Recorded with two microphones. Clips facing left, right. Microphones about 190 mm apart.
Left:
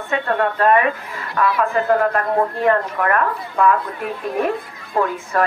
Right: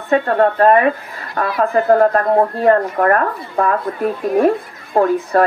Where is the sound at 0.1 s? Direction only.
35° right (ahead or behind).